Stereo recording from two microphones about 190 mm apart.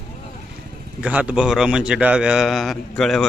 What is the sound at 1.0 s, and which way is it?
A man's voice, 5° right (ahead or behind).